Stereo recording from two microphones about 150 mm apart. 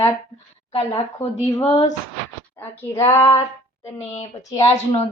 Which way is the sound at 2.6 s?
20° left (ahead or behind).